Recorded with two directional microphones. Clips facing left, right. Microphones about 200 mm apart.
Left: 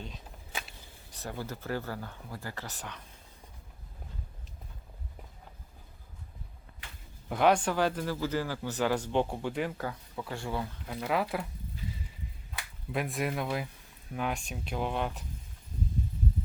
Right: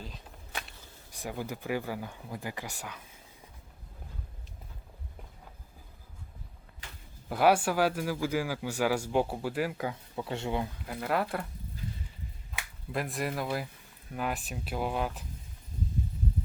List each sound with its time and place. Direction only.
0.0 s a sound: centre (ahead or behind)
1.1 s speech: 10° right (ahead or behind)
7.3 s speech: 5° right (ahead or behind); by 10.7 s 20° right (ahead or behind)
10.8 s speech: centre (ahead or behind)
12.9 s speech: centre (ahead or behind)